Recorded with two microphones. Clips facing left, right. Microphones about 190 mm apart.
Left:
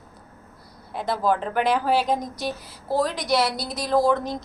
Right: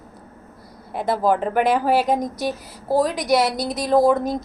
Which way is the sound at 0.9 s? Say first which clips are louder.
Right 4 dB; 50° right (ahead or behind).